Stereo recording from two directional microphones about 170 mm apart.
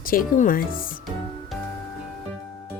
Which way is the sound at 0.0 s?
55° left (ahead or behind).